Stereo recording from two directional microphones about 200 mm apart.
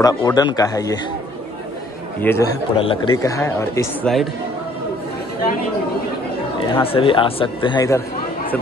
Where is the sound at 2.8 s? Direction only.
25° left (ahead or behind).